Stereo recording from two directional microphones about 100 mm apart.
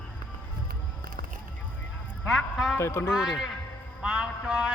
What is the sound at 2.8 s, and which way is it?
Speech, 25° left (ahead or behind).